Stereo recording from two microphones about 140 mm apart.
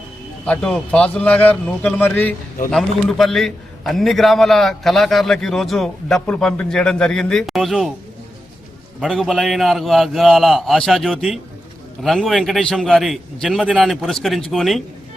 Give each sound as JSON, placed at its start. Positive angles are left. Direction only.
{"t": 0.4, "sound": "a man's voice", "side_deg": 5}
{"t": 2.6, "sound": "a man's voice", "side_deg": 5}
{"t": 9.0, "sound": "a man's voice", "side_deg": 0}